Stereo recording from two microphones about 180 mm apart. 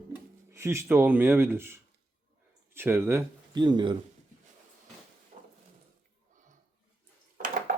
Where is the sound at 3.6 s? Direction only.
25° right (ahead or behind).